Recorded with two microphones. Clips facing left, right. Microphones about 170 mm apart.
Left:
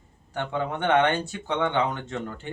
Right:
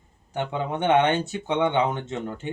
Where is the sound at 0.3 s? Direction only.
20° right (ahead or behind).